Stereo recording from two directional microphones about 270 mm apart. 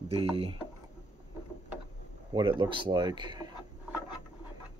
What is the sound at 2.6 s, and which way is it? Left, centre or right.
Speech, centre.